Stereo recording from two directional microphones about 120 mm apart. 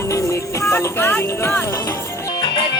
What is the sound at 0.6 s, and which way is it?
Speech, 20° left (ahead or behind).